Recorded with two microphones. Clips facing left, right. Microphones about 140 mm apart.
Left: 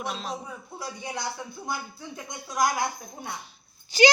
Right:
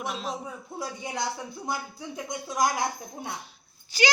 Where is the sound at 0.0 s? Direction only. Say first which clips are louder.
Even; 5° right (ahead or behind).